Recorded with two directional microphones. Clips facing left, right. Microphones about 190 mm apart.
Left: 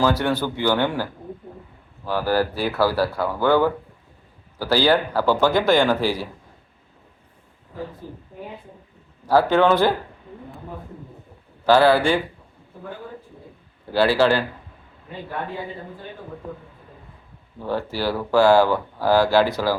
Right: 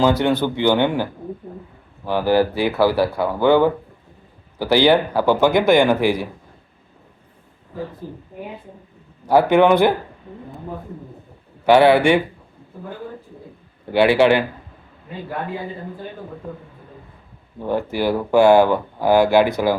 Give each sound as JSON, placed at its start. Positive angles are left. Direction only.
{"t": 0.0, "sound": "speech", "side_deg": -20}
{"t": 9.2, "sound": "speech", "side_deg": -20}
{"t": 11.6, "sound": "speech", "side_deg": -20}
{"t": 13.9, "sound": "speech", "side_deg": -20}
{"t": 17.6, "sound": "speech", "side_deg": -15}